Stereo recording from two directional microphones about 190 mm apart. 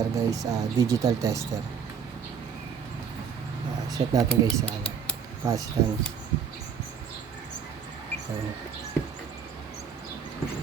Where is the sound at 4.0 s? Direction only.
25° right (ahead or behind).